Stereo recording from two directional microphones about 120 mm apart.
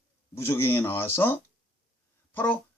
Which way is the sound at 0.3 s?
20° left (ahead or behind).